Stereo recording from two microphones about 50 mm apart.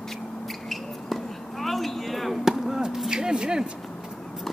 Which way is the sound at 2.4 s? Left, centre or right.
Centre.